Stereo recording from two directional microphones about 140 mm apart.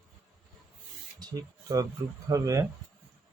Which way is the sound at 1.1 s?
25° right (ahead or behind).